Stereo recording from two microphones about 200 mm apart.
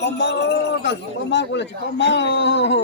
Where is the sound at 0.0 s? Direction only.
60° left (ahead or behind).